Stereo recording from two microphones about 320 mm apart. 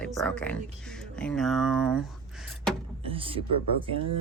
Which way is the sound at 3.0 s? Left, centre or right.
Centre.